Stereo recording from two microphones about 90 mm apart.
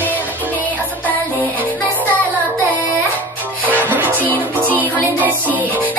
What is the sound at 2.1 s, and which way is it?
Child singing, 20° left (ahead or behind).